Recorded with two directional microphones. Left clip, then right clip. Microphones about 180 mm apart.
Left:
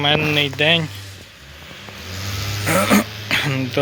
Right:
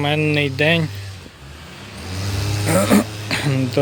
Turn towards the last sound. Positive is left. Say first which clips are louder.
# left 2 dB
turn(degrees=0)  # may be behind; listen again after turning